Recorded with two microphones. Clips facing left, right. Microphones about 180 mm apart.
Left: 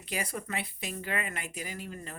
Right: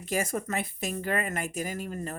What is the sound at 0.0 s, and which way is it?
Speech, 45° right (ahead or behind).